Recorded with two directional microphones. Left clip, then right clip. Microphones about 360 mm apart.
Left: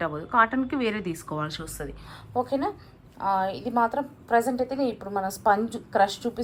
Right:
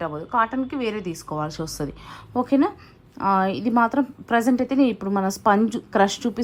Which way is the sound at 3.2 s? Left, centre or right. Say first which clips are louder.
Right 5 dB; left.